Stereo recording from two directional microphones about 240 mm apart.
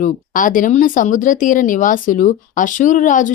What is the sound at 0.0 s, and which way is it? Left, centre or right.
Speech, left.